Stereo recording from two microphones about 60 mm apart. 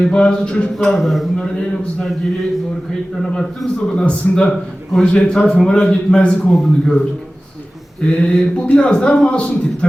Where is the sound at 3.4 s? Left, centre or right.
Centre.